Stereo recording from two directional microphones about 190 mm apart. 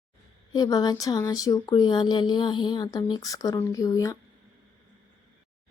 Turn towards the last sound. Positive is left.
turn(degrees=15)  # may be behind; listen again after turning